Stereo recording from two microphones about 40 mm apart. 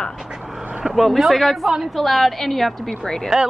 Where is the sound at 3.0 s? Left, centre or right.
Centre.